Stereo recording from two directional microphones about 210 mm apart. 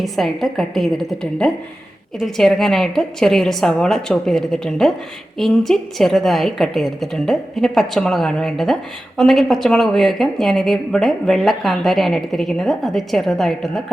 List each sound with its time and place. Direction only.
0.0 s a woman's voice: centre (ahead or behind)